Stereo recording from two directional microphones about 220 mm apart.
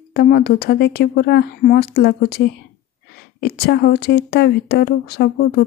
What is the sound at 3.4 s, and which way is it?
Speech, 50° left (ahead or behind).